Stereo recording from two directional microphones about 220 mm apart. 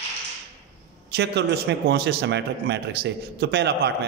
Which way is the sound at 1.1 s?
50° right (ahead or behind).